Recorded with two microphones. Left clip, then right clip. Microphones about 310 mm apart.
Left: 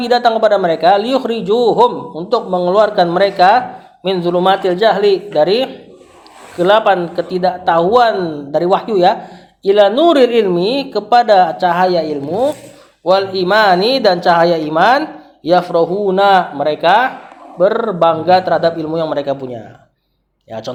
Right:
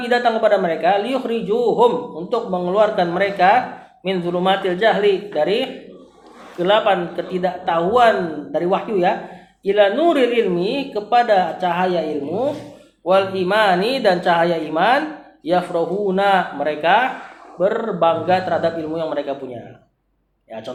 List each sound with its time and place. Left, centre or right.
0.0 s a man's voice: left
20.5 s a man's voice: left